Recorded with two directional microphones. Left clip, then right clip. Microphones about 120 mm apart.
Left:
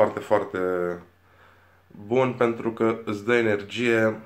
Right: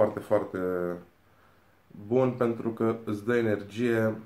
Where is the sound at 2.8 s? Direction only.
20° right (ahead or behind).